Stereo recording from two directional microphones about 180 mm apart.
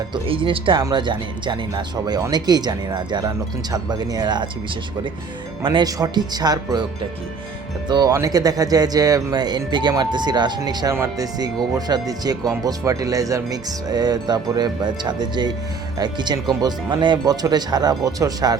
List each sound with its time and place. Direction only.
0.1 s speech: 30° right (ahead or behind)
5.6 s speech: 25° right (ahead or behind)
7.9 s speech: 20° right (ahead or behind)